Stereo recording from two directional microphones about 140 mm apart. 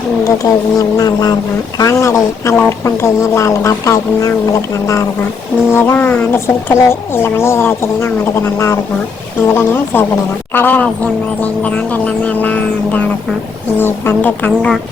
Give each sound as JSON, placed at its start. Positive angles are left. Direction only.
{"t": 0.3, "sound": "speech", "side_deg": 25}
{"t": 5.7, "sound": "speech", "side_deg": 15}